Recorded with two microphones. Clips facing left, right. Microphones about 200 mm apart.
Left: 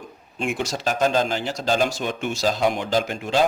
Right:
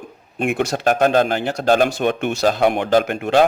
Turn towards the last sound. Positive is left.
turn(degrees=-60)  # may be behind; listen again after turning